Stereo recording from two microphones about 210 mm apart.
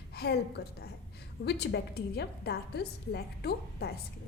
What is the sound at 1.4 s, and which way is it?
A woman's voice, 50° left (ahead or behind).